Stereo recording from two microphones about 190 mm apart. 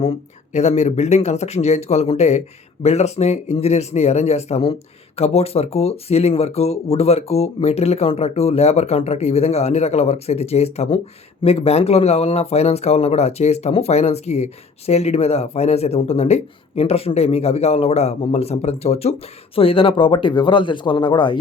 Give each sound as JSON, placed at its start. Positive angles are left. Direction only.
{"t": 0.5, "sound": "speech", "side_deg": 35}